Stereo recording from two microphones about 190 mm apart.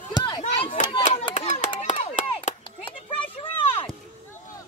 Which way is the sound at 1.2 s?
25° left (ahead or behind).